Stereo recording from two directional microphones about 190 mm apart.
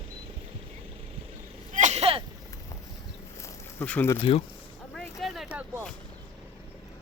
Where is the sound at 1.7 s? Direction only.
40° right (ahead or behind).